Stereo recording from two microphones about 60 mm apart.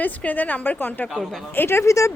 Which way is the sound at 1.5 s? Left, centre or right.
Left.